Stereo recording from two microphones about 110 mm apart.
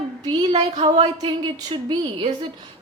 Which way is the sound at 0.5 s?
80° right.